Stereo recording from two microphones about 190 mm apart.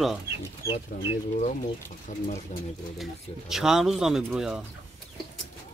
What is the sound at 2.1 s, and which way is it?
Speech, 45° left (ahead or behind).